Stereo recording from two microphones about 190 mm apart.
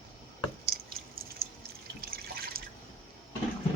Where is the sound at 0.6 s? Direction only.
55° right (ahead or behind).